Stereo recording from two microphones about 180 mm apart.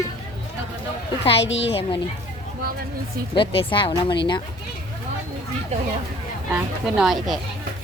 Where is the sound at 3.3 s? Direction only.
30° left (ahead or behind).